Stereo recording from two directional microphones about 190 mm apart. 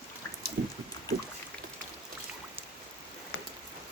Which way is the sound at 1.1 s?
20° left (ahead or behind).